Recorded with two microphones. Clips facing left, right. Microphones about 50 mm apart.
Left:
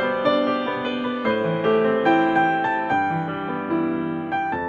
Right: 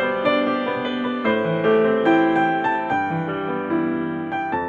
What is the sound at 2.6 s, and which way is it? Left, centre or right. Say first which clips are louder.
Music: even; left.